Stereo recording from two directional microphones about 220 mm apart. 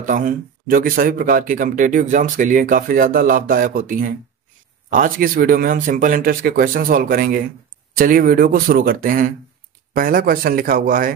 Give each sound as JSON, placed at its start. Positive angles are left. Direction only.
{"t": 0.0, "sound": "speech", "side_deg": -35}